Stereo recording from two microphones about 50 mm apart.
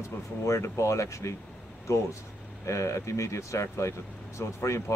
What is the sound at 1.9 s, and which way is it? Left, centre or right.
Speech, left.